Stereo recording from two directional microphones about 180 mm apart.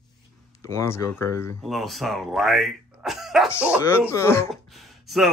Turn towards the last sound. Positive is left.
turn(degrees=0)  # may be behind; listen again after turning